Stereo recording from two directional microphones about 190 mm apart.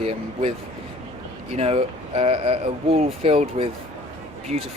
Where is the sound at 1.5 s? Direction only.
35° right (ahead or behind).